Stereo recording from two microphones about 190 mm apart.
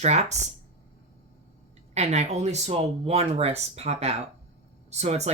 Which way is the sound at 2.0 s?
35° right (ahead or behind).